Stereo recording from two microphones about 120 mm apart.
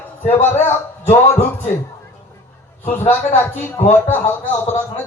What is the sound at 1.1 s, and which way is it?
Music, 65° left (ahead or behind).